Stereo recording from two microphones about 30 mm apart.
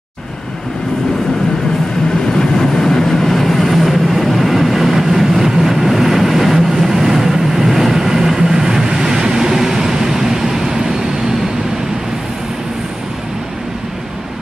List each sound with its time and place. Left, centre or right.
2.3 s vehicle: centre